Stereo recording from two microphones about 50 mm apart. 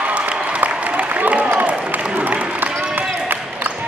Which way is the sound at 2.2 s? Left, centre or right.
Right.